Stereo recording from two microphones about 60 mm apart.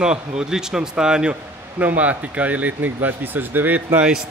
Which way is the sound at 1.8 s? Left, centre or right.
Right.